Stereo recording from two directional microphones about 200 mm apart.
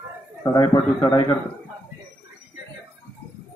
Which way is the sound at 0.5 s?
20° left (ahead or behind).